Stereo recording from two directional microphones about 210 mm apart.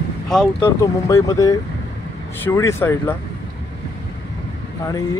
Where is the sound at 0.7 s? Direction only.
15° left (ahead or behind).